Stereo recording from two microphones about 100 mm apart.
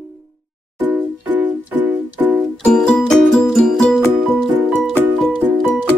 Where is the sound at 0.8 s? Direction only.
15° right (ahead or behind).